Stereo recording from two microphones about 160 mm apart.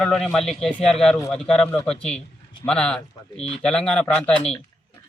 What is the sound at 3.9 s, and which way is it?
Speech, 5° left (ahead or behind).